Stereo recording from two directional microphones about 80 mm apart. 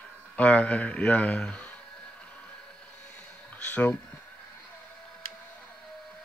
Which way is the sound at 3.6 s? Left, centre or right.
Centre.